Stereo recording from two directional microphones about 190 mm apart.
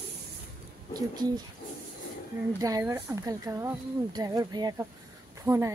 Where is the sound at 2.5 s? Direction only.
20° right (ahead or behind).